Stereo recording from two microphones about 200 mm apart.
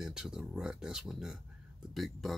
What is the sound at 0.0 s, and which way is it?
Speech, centre (ahead or behind).